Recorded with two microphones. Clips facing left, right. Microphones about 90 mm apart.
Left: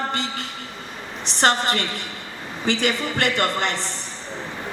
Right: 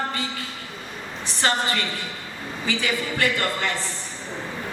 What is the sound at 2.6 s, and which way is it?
A man's voice, 70° left (ahead or behind).